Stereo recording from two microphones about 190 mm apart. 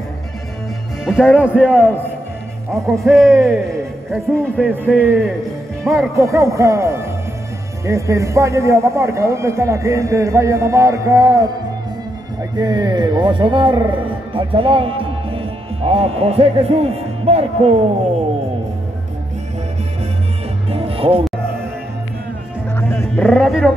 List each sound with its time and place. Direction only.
1.0 s a man's voice: 5° right (ahead or behind)
2.9 s a man's voice: centre (ahead or behind); by 11.5 s 20° right (ahead or behind)
12.5 s speech: 20° right (ahead or behind)
20.7 s music: 30° right (ahead or behind)
22.8 s music: 10° left (ahead or behind)
23.2 s a man's voice: centre (ahead or behind)